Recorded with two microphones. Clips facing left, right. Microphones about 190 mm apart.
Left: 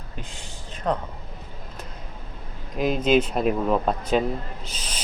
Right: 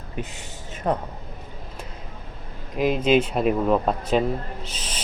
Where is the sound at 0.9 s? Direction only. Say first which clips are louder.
Right 1 dB; 20° right (ahead or behind).